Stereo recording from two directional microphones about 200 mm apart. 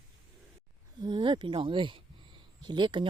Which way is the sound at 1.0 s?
20° right (ahead or behind).